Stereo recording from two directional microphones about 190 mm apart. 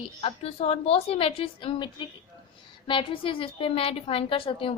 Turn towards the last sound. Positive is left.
turn(degrees=30)  # may be behind; listen again after turning